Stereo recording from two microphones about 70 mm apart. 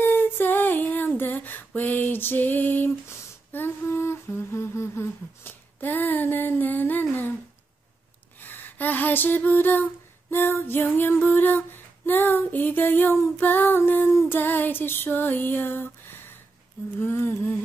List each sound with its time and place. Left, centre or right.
0.0 s female singing: left
3.1 s humming: left
8.4 s a sound: left
10.3 s female singing: left
17.0 s humming: left